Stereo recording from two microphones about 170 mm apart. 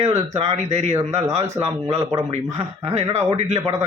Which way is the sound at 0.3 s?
40° right (ahead or behind).